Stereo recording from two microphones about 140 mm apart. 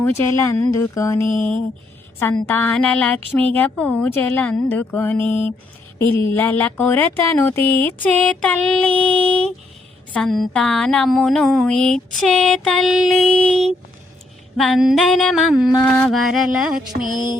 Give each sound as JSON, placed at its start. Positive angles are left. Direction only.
{"t": 0.0, "sound": "speech", "side_deg": 20}
{"t": 2.3, "sound": "speech", "side_deg": 10}
{"t": 10.1, "sound": "a sound", "side_deg": 5}